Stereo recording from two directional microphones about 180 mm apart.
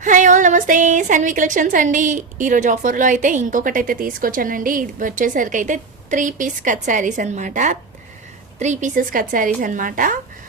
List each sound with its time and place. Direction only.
0.0 s a woman's voice: 45° right (ahead or behind)